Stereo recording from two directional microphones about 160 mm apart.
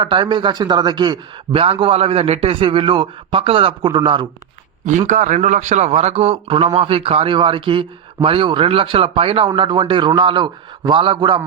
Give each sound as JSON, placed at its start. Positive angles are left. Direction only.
{"t": 0.0, "sound": "a man's voice", "side_deg": -30}
{"t": 4.9, "sound": "a man's voice", "side_deg": -50}